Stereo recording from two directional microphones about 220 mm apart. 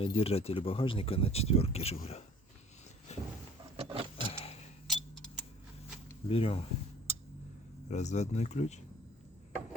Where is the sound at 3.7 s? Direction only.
25° right (ahead or behind).